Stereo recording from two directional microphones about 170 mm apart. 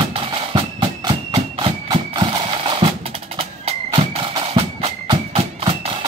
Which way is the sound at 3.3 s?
35° right (ahead or behind).